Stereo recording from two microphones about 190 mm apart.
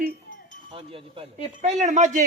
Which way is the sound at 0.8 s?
30° right (ahead or behind).